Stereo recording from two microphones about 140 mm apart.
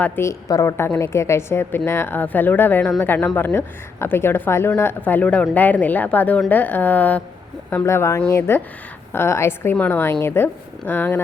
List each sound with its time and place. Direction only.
0.0 s a woman's voice: 20° left (ahead or behind)